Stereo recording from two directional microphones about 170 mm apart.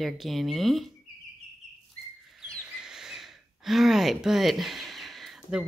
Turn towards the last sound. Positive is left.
turn(degrees=0)  # may be behind; listen again after turning